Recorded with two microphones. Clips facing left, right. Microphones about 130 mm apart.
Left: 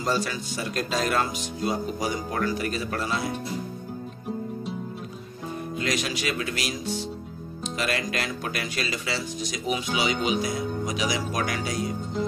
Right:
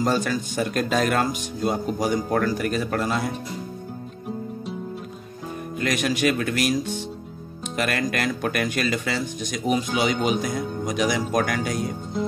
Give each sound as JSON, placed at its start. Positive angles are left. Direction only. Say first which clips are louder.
{"t": 0.0, "sound": "speech", "louder": "right 4 dB", "side_deg": -50}
{"t": 5.8, "sound": "speech", "louder": "right 6 dB", "side_deg": -50}